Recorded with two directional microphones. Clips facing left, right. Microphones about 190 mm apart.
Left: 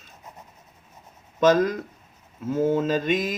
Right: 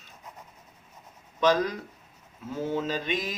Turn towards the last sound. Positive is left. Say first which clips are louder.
# left 7 dB
turn(degrees=45)  # may be behind; listen again after turning